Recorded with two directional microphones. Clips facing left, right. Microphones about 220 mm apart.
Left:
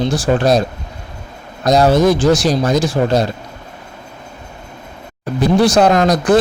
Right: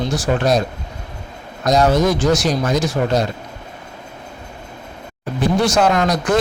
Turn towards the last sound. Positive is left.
turn(degrees=35)  # may be behind; listen again after turning